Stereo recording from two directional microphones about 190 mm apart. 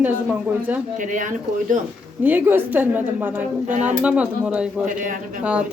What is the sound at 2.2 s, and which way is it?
A woman's voice, 10° right (ahead or behind).